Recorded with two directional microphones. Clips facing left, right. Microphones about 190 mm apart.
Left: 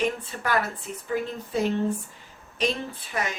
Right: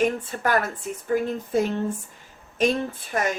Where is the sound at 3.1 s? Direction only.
45° right (ahead or behind).